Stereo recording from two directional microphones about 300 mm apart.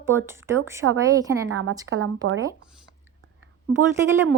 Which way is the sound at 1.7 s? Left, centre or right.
Centre.